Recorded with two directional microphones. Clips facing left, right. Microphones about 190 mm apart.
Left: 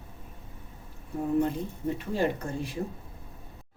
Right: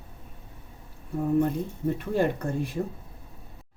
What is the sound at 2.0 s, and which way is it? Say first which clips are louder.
Speech: right 2 dB; 55° right (ahead or behind).